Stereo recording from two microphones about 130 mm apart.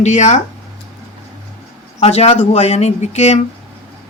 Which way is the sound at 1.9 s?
55° left (ahead or behind).